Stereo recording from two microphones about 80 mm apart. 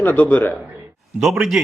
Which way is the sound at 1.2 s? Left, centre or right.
Centre.